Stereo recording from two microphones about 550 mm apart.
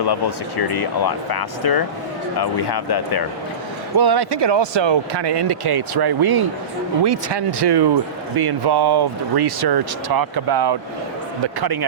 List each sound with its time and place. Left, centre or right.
0.0 s speech: left
3.9 s speech: right